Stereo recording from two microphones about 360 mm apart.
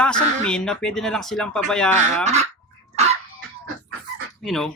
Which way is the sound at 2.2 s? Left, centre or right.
Centre.